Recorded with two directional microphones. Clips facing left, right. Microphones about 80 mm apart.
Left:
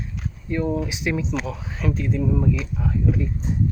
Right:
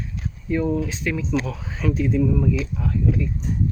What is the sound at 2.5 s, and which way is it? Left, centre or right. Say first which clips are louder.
Speech: right 1 dB; centre.